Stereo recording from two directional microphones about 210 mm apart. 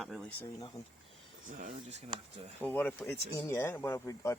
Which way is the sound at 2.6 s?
10° left (ahead or behind).